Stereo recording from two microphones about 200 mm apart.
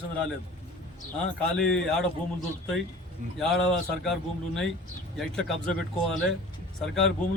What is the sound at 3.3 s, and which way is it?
A man's voice, centre (ahead or behind).